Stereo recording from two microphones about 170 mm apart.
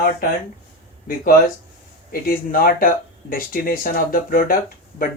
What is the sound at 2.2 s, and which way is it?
Speech, 60° left (ahead or behind).